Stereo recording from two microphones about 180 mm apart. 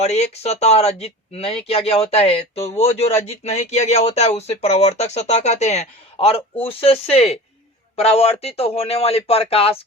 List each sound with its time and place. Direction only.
0.0 s speech: 35° left (ahead or behind)